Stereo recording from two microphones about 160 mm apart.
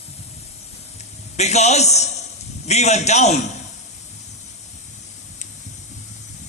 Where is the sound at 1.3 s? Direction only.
45° left (ahead or behind).